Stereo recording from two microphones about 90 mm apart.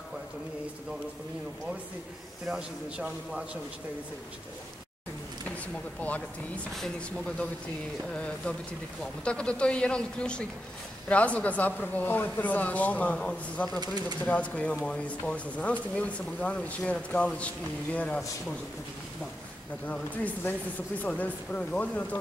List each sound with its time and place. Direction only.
2.4 s a man's voice: 5° right (ahead or behind)
5.9 s speech: 15° left (ahead or behind)
13.7 s speech: 50° right (ahead or behind)
14.2 s speech: 15° left (ahead or behind)
21.0 s speech: 15° left (ahead or behind)